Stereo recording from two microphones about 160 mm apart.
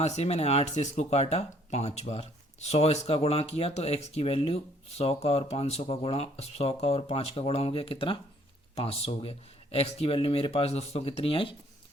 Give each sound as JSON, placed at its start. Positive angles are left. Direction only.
{"t": 0.0, "sound": "speech", "side_deg": 45}